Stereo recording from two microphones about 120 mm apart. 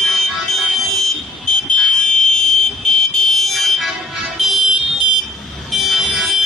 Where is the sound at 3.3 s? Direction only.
Centre (ahead or behind).